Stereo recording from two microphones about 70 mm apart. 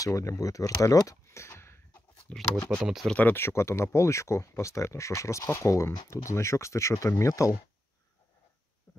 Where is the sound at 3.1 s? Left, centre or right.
Left.